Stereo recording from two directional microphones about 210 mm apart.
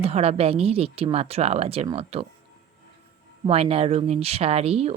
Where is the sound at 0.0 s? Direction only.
30° right (ahead or behind).